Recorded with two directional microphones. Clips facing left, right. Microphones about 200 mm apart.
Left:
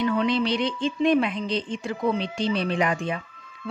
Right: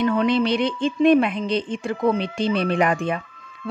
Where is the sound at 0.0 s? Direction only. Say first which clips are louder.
Right 4 dB; 50° right (ahead or behind).